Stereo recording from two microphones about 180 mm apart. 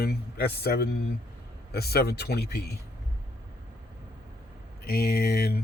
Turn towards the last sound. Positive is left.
turn(degrees=60)  # may be behind; listen again after turning